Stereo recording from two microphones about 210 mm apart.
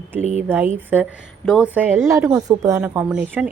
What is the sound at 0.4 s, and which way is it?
Speech, 10° right (ahead or behind).